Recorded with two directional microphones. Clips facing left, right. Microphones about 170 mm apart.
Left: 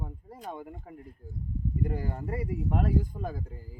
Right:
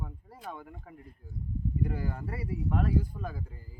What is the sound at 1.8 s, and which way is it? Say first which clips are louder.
Speech: left 2 dB; 45° left (ahead or behind).